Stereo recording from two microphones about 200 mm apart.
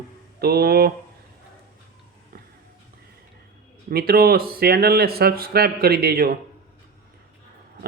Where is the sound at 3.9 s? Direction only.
50° right (ahead or behind).